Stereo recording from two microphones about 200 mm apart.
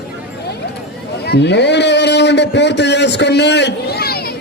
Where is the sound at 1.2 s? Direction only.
55° left (ahead or behind).